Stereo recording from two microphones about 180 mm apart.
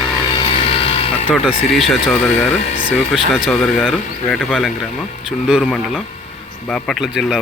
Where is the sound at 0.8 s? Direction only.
35° left (ahead or behind).